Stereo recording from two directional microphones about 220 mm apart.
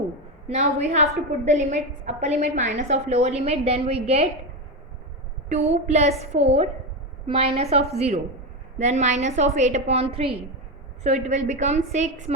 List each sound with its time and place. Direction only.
0.4 s a woman's voice: 30° right (ahead or behind)
5.5 s a woman's voice: 30° right (ahead or behind)